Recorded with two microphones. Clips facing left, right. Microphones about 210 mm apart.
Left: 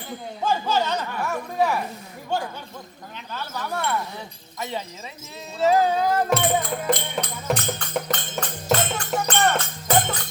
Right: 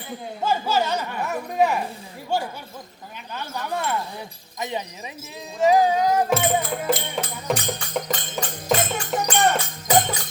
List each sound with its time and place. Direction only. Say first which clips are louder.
0.4 s speech: right 1 dB; 10° right (ahead or behind)
5.5 s speech: right 2 dB; 15° right (ahead or behind)
8.4 s music: even; 15° right (ahead or behind)